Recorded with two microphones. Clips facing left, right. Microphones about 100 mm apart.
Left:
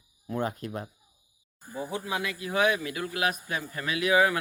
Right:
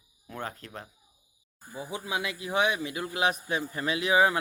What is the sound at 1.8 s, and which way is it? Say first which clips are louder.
A man's voice: left 1 dB; 15° right (ahead or behind).